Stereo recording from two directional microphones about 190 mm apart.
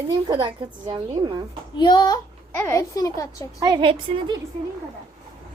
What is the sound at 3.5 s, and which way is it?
Speech, 20° right (ahead or behind).